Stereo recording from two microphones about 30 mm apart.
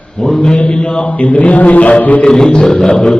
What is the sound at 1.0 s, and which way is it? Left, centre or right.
A man's voice, left.